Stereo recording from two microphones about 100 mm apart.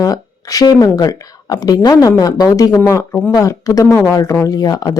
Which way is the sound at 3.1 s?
10° left (ahead or behind).